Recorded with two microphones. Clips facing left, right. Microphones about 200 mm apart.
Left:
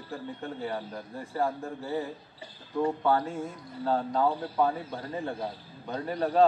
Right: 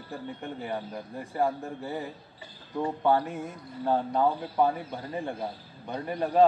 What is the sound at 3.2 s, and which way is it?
Speech, 15° right (ahead or behind).